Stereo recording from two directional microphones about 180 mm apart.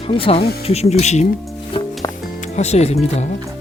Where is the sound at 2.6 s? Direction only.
35° left (ahead or behind).